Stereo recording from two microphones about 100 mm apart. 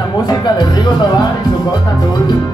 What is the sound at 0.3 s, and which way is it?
Speech, 45° left (ahead or behind).